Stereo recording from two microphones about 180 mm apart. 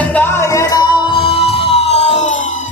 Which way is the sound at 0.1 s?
10° left (ahead or behind).